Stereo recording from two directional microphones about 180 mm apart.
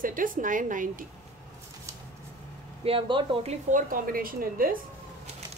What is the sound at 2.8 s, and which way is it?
Speech, 30° right (ahead or behind).